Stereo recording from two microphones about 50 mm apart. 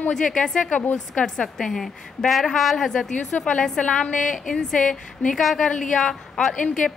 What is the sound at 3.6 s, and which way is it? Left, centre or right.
A woman's voice, centre.